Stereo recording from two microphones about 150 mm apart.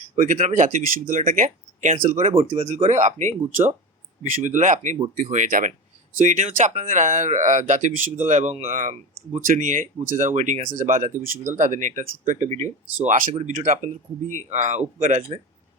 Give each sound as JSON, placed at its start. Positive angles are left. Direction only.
{"t": 0.2, "sound": "speech", "side_deg": -55}
{"t": 1.5, "sound": "speech", "side_deg": -50}
{"t": 2.3, "sound": "speech", "side_deg": -40}
{"t": 2.6, "sound": "speech", "side_deg": -55}
{"t": 13.3, "sound": "speech", "side_deg": -50}